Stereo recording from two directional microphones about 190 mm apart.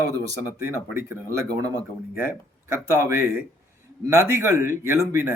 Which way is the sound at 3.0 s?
15° right (ahead or behind).